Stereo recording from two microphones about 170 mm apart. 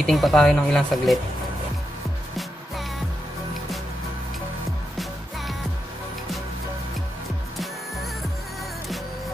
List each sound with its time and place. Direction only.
0.0 s speech: centre (ahead or behind)
7.5 s music: centre (ahead or behind)